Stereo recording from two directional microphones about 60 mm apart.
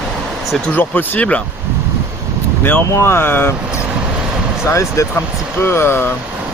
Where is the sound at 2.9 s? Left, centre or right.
Left.